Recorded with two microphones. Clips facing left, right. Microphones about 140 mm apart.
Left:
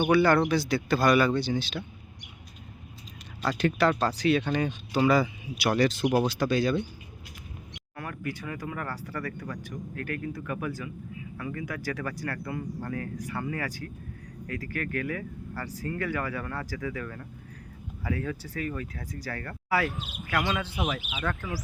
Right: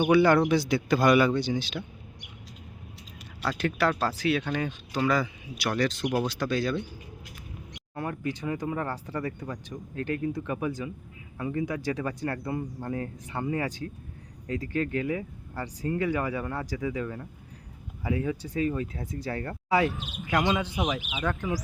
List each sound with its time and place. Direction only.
0.1 s speech: 20° right (ahead or behind)
3.4 s speech: centre (ahead or behind)
7.9 s speech: 25° right (ahead or behind)